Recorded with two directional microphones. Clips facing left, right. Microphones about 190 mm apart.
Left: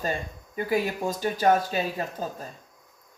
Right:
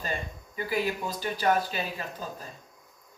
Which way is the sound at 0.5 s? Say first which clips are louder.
Left 3 dB; 45° left (ahead or behind).